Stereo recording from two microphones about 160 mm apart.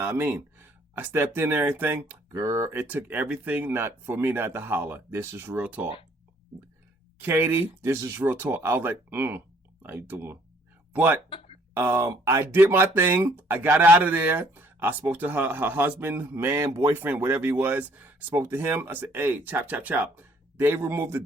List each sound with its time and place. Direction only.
0.0 s speech: 15° right (ahead or behind)
7.2 s speech: 15° right (ahead or behind)
11.3 s a sound: 35° left (ahead or behind)
11.7 s speech: 15° right (ahead or behind)